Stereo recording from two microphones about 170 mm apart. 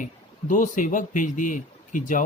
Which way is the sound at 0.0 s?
50° left (ahead or behind).